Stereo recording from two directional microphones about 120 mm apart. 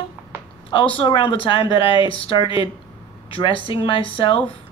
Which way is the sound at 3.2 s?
45° left (ahead or behind).